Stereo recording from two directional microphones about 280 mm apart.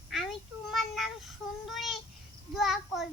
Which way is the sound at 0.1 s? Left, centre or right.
Centre.